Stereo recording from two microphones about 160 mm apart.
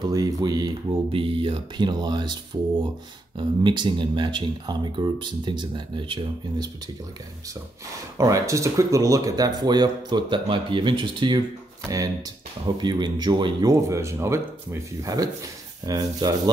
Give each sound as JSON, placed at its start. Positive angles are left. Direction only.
{"t": 0.1, "sound": "speech", "side_deg": -25}
{"t": 3.3, "sound": "speech", "side_deg": -30}
{"t": 8.2, "sound": "speech", "side_deg": -20}
{"t": 12.7, "sound": "speech", "side_deg": -25}